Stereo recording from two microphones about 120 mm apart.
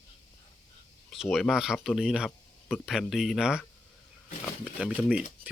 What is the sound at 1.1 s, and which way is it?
Speech, centre (ahead or behind).